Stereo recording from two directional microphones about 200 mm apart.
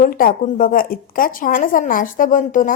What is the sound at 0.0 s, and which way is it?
Speech, 45° left (ahead or behind).